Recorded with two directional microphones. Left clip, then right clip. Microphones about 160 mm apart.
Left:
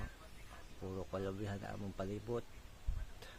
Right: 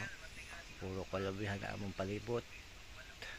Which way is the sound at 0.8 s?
5° right (ahead or behind).